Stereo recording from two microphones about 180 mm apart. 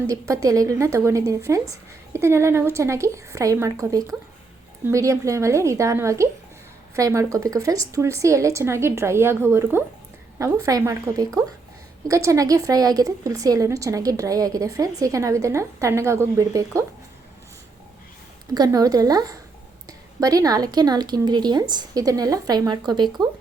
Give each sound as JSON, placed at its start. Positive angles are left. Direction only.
{"t": 0.1, "sound": "speech", "side_deg": -20}
{"t": 18.5, "sound": "speech", "side_deg": -20}